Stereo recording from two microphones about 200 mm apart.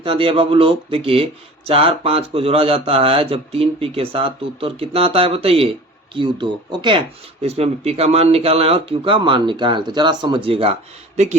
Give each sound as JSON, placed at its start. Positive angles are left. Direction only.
{"t": 0.0, "sound": "speech", "side_deg": -25}